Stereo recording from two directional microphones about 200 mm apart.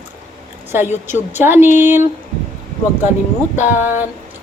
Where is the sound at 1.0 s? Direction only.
10° right (ahead or behind).